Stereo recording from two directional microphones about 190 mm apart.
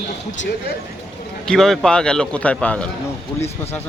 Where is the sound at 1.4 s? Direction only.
Centre (ahead or behind).